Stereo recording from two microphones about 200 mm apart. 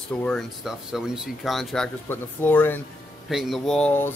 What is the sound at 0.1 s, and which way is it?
Speech, 5° left (ahead or behind).